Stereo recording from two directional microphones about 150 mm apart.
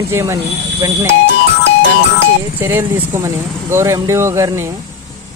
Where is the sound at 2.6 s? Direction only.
15° right (ahead or behind).